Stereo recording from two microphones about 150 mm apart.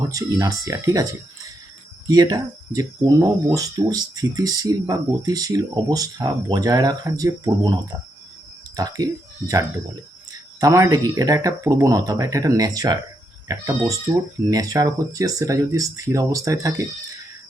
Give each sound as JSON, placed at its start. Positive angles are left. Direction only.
{"t": 0.1, "sound": "speech", "side_deg": -20}
{"t": 2.0, "sound": "speech", "side_deg": -25}
{"t": 10.6, "sound": "speech", "side_deg": -20}